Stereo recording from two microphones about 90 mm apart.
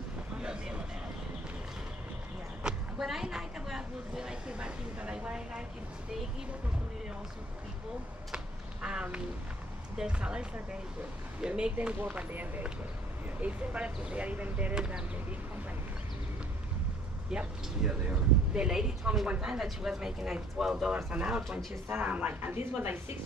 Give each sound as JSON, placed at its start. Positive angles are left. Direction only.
{"t": 0.4, "sound": "vehicle", "side_deg": -10}
{"t": 2.6, "sound": "speech", "side_deg": -5}
{"t": 8.8, "sound": "speech", "side_deg": -10}
{"t": 17.3, "sound": "speech", "side_deg": -10}
{"t": 21.8, "sound": "speech", "side_deg": -20}